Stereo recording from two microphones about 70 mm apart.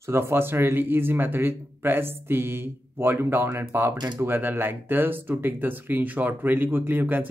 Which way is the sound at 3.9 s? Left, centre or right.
Right.